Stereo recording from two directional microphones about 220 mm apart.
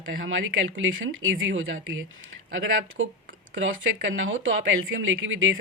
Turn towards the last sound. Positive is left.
turn(degrees=-60)  # may be behind; listen again after turning